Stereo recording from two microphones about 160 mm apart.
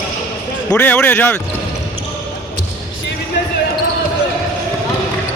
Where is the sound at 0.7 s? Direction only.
10° left (ahead or behind).